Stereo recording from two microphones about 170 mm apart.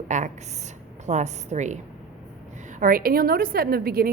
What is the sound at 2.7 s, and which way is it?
A woman's voice, 55° right (ahead or behind).